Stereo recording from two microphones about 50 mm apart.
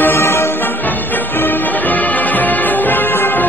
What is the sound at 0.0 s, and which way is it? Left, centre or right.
Music, left.